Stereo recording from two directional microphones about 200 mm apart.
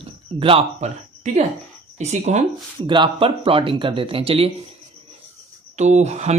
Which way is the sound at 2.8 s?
25° right (ahead or behind).